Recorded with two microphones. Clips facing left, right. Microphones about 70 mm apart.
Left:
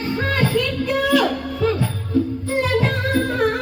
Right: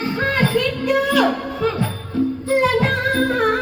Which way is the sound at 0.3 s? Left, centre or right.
Centre.